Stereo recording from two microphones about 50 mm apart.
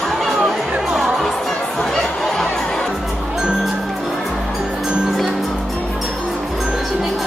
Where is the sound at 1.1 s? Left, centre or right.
Centre.